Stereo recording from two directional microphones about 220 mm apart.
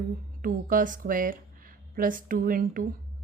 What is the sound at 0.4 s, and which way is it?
Speech, 40° right (ahead or behind).